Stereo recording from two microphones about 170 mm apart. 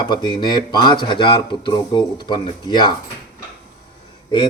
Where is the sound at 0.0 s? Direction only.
25° left (ahead or behind).